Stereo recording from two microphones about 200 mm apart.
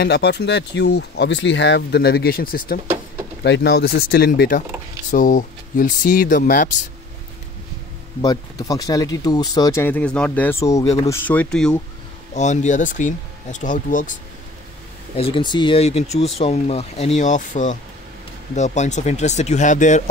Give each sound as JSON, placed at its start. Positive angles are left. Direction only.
{"t": 0.0, "sound": "speech", "side_deg": 55}
{"t": 3.4, "sound": "speech", "side_deg": 60}
{"t": 8.2, "sound": "speech", "side_deg": 20}
{"t": 12.4, "sound": "speech", "side_deg": 35}
{"t": 15.1, "sound": "speech", "side_deg": 25}